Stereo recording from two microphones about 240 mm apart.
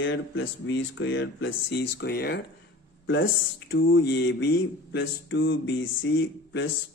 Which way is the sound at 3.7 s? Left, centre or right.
Left.